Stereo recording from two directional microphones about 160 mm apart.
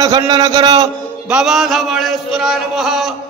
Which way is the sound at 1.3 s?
5° right (ahead or behind).